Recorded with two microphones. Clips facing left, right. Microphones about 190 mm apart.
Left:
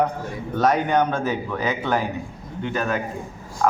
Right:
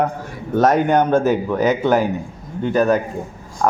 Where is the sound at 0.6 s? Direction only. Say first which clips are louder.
Right 5 dB; 45° right (ahead or behind).